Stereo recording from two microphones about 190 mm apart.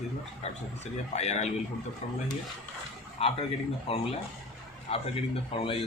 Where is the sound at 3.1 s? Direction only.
30° left (ahead or behind).